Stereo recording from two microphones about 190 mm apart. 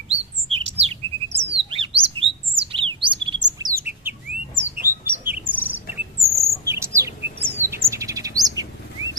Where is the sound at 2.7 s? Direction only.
30° right (ahead or behind).